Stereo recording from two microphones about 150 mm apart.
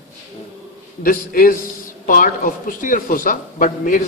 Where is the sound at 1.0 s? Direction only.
70° left (ahead or behind).